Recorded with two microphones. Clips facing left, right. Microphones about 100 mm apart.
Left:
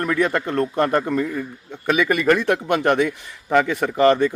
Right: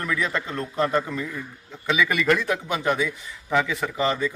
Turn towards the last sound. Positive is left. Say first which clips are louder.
# left 8 dB
turn(degrees=60)  # may be behind; listen again after turning